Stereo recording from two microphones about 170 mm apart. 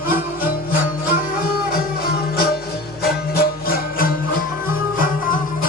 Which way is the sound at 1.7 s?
65° left (ahead or behind).